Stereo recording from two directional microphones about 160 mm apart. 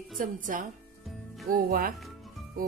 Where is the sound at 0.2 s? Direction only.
55° right (ahead or behind).